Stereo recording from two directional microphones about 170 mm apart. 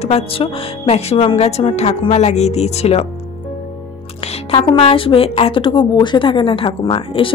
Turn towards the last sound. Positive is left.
turn(degrees=30)  # may be behind; listen again after turning